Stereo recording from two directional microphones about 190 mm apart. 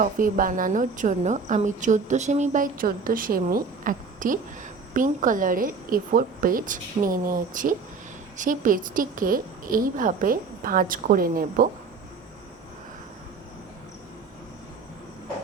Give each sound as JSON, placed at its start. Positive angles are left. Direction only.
{"t": 0.0, "sound": "a woman's voice", "side_deg": -45}